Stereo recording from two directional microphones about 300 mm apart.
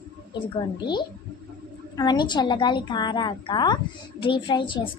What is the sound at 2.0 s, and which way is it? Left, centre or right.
A woman's voice, centre.